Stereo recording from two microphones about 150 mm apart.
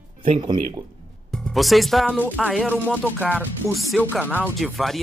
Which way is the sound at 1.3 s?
Centre (ahead or behind).